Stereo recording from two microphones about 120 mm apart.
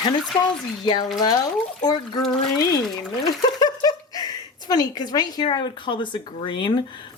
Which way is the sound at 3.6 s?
30° left (ahead or behind).